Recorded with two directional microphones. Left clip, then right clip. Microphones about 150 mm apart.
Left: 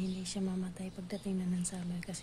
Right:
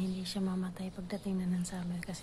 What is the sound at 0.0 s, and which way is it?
A woman's voice, 5° left (ahead or behind).